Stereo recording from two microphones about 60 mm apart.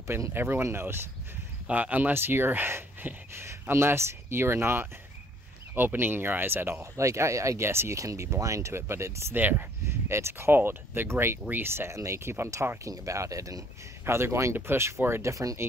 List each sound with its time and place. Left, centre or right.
0.0 s speech: right
0.3 s speech: right
1.7 s speech: right
3.3 s speech: right
6.8 s speech: right
8.0 s speech: right
9.3 s speech: right
9.8 s speech: right
12.0 s speech: right
12.8 s speech: right
14.0 s speech: right